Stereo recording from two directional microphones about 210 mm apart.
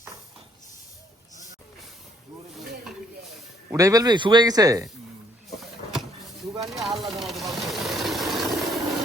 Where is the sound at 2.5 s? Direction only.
Centre (ahead or behind).